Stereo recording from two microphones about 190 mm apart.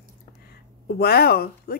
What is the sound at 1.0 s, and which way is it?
Speech, 55° left (ahead or behind).